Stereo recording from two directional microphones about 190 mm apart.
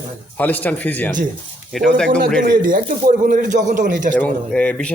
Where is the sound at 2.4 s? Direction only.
45° right (ahead or behind).